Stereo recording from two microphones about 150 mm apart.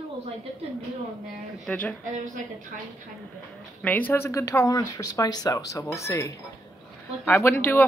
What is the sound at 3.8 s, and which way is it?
Speech, 10° left (ahead or behind).